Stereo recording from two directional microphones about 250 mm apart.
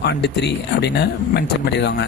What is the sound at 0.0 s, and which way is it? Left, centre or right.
Speech, left.